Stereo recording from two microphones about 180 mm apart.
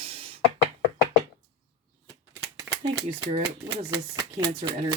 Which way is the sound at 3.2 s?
35° right (ahead or behind).